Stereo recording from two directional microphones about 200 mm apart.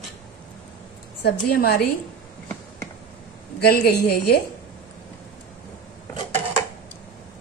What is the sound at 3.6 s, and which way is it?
Speech, 55° left (ahead or behind).